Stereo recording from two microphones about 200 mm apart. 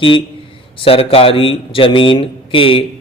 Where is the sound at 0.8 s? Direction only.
30° left (ahead or behind).